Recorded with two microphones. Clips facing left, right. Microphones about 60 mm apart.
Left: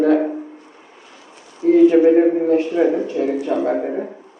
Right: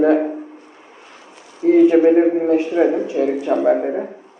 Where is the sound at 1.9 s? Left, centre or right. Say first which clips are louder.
Even; centre.